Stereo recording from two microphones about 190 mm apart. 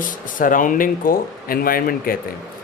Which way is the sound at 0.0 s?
45° left (ahead or behind).